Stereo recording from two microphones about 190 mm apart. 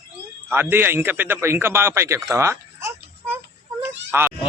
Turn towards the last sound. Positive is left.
turn(degrees=-10)  # may be behind; listen again after turning